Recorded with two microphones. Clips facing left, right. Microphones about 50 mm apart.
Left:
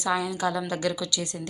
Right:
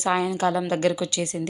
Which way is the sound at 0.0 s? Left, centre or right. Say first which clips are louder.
Right 4 dB; right.